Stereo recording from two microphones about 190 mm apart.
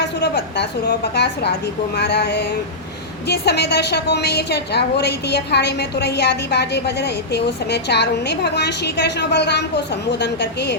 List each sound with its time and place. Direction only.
0.0 s a woman's voice: 60° left (ahead or behind)